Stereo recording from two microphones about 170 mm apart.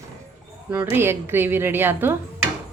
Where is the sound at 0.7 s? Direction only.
10° right (ahead or behind).